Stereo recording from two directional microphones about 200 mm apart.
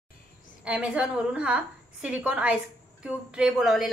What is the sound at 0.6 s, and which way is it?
A woman's voice, 5° right (ahead or behind).